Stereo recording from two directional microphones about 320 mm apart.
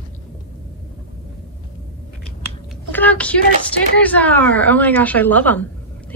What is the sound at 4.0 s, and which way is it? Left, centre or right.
Speech, centre.